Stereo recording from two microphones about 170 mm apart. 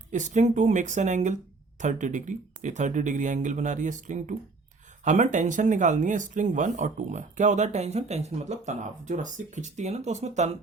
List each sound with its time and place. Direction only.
0.1 s speech: 45° right (ahead or behind)